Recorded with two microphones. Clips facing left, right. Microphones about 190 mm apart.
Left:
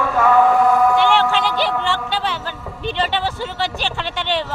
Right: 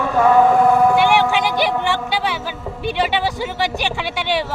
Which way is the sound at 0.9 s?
15° right (ahead or behind).